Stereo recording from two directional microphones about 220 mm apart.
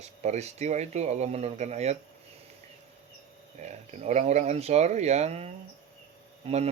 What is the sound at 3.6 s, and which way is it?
Speech, 30° right (ahead or behind).